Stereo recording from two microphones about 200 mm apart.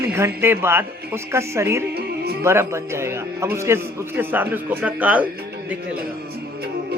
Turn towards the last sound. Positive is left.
turn(degrees=-5)  # may be behind; listen again after turning